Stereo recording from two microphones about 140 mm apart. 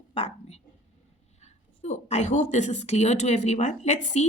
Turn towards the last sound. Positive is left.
turn(degrees=55)  # may be behind; listen again after turning